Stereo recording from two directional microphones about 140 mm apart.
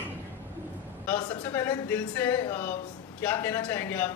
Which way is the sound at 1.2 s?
30° left (ahead or behind).